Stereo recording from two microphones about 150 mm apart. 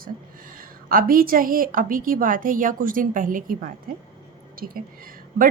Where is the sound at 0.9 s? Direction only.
70° right (ahead or behind).